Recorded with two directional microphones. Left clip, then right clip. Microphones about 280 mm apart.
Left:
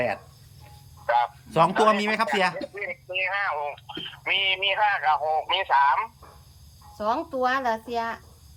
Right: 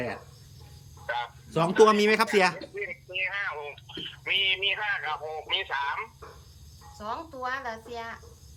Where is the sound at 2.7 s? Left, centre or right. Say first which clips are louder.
Left 3 dB; centre.